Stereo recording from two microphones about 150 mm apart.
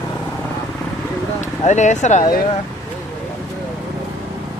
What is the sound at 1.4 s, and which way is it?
Speech, 50° left (ahead or behind).